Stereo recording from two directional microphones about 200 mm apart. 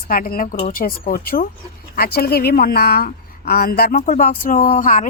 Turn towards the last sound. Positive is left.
turn(degrees=40)  # may be behind; listen again after turning